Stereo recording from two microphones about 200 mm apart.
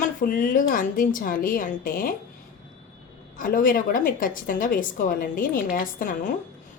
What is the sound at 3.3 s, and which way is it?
A woman's voice, 45° left (ahead or behind).